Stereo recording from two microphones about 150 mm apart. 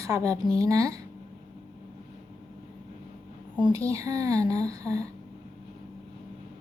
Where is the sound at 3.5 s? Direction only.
25° right (ahead or behind).